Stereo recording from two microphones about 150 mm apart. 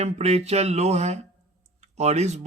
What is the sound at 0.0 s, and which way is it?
Speech, 45° right (ahead or behind).